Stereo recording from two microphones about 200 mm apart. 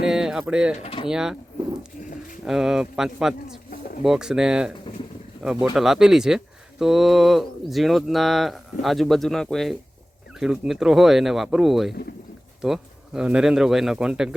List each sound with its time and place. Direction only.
0.1 s speech: 5° right (ahead or behind)
0.8 s speech: 30° left (ahead or behind)
1.0 s speech: 5° right (ahead or behind)
2.4 s speech: centre (ahead or behind)